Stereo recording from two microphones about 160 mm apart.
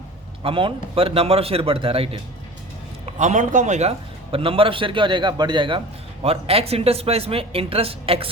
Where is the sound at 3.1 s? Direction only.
50° right (ahead or behind).